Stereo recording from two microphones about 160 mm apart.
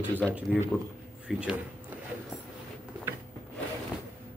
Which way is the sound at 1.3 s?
5° right (ahead or behind).